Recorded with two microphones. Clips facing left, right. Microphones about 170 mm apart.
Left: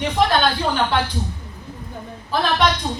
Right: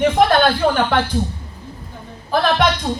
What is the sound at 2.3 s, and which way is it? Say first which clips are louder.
Speech: right 4 dB; 50° right (ahead or behind).